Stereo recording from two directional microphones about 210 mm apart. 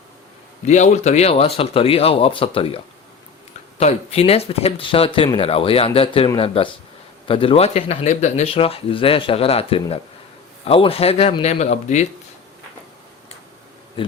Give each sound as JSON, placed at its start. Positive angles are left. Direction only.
{"t": 0.6, "sound": "speech", "side_deg": 35}